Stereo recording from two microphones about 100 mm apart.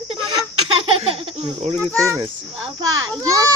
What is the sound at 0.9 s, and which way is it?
Speech, 65° right (ahead or behind).